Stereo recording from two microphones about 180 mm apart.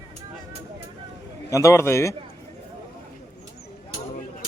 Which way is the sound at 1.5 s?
15° left (ahead or behind).